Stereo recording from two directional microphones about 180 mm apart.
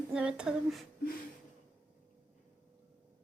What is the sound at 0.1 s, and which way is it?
Speech, 5° right (ahead or behind).